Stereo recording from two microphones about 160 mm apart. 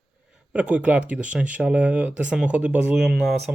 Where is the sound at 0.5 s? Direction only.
10° right (ahead or behind).